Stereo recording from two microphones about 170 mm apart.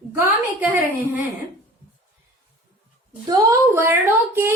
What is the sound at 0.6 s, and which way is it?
Speech, 10° right (ahead or behind).